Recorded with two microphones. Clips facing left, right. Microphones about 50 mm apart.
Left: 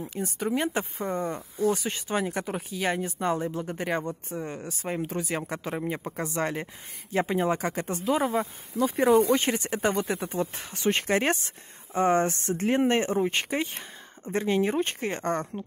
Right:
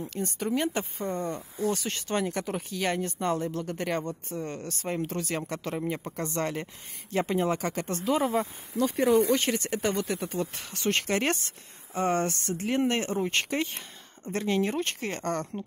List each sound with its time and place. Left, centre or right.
0.0 s speech: centre
9.3 s speech: centre
13.1 s speech: centre